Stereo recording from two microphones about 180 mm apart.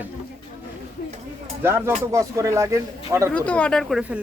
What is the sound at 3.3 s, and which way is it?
Speech, 5° left (ahead or behind).